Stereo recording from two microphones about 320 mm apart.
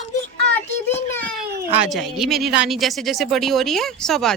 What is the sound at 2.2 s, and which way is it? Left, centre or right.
Speech, centre.